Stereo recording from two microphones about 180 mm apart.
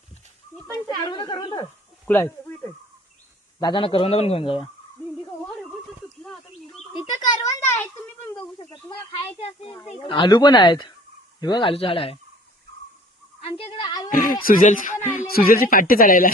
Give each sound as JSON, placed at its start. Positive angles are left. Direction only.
{"t": 1.0, "sound": "speech", "side_deg": 25}
{"t": 2.0, "sound": "speech", "side_deg": 15}
{"t": 3.6, "sound": "speech", "side_deg": 25}
{"t": 6.7, "sound": "bird", "side_deg": -5}
{"t": 7.1, "sound": "a sound", "side_deg": 20}
{"t": 8.3, "sound": "bird", "side_deg": 20}
{"t": 9.4, "sound": "speech", "side_deg": 35}
{"t": 13.4, "sound": "a woman's voice", "side_deg": 30}
{"t": 14.1, "sound": "speech", "side_deg": 50}